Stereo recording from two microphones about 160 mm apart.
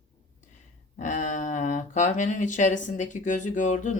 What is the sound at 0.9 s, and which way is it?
Speech, 50° left (ahead or behind).